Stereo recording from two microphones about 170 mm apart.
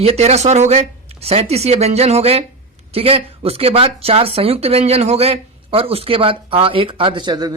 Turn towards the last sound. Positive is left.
turn(degrees=-25)  # may be behind; listen again after turning